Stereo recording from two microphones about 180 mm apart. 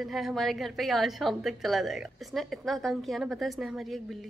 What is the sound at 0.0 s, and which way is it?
A woman's voice, centre (ahead or behind).